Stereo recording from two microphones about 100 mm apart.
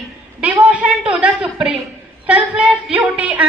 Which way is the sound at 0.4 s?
15° right (ahead or behind).